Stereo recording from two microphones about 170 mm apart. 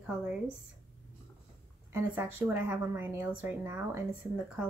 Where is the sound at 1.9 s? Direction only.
15° right (ahead or behind).